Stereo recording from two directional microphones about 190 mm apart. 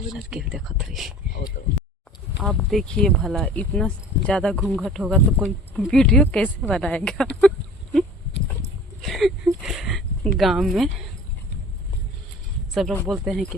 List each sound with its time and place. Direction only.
0.1 s speech: 5° right (ahead or behind)
2.4 s speech: centre (ahead or behind)
9.0 s speech: centre (ahead or behind)
12.7 s speech: centre (ahead or behind)